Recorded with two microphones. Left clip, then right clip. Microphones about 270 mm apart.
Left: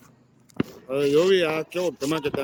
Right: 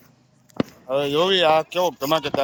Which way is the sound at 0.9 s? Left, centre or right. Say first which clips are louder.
Even; centre.